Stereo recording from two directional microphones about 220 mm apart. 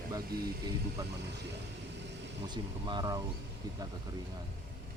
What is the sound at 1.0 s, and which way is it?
Speech, 15° right (ahead or behind).